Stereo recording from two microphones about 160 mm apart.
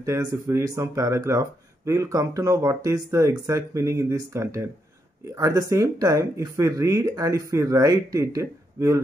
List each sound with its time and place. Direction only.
0.0 s speech: 20° right (ahead or behind)